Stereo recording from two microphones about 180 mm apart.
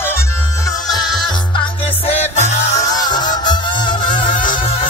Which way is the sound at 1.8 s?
35° left (ahead or behind).